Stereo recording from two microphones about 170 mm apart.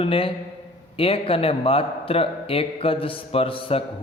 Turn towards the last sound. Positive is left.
turn(degrees=30)  # may be behind; listen again after turning